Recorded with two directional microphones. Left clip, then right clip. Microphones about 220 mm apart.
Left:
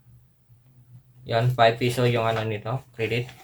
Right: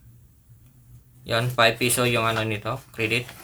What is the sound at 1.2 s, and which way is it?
Speech, 25° right (ahead or behind).